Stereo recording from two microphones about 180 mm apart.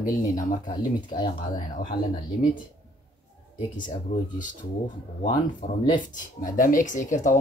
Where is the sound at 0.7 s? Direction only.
25° left (ahead or behind).